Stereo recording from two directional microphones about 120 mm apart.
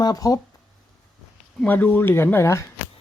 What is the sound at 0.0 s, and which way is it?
Speech, 30° left (ahead or behind).